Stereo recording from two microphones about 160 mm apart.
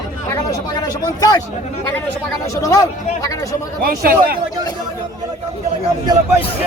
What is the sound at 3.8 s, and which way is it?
Speech, 65° right (ahead or behind).